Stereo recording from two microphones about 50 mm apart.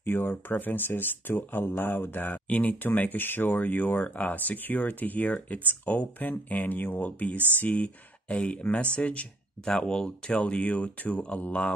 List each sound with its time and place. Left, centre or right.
0.0 s speech: left
9.7 s speech: centre